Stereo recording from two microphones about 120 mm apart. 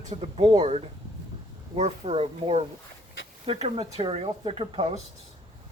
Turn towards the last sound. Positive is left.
turn(degrees=-50)  # may be behind; listen again after turning